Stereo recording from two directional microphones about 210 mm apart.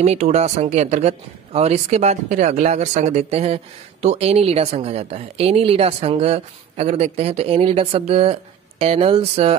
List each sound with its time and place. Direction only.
0.0 s speech: 30° right (ahead or behind)